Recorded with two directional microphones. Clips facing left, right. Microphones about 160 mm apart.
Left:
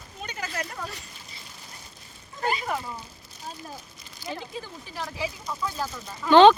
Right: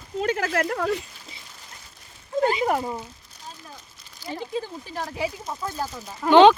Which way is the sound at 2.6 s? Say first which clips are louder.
Right 7 dB; 50° right (ahead or behind).